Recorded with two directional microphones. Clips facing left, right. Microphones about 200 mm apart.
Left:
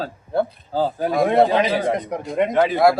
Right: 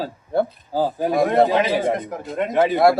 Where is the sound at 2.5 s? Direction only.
20° right (ahead or behind).